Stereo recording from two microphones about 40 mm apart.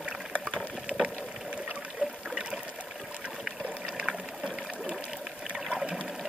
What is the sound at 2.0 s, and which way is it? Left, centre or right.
Water, right.